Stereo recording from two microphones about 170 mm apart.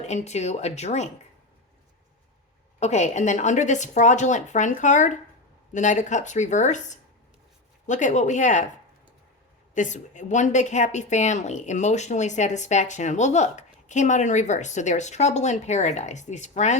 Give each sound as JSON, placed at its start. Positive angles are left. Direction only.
{"t": 0.0, "sound": "speech", "side_deg": 40}
{"t": 2.8, "sound": "a woman's voice", "side_deg": 40}
{"t": 9.7, "sound": "a woman's voice", "side_deg": 45}